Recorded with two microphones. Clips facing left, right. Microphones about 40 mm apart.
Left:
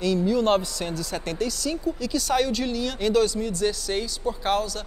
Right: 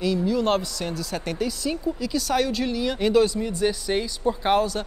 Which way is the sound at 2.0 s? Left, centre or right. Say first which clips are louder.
Even; centre.